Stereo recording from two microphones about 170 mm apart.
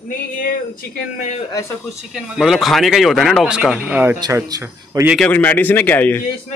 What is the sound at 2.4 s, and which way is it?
Speech, centre (ahead or behind).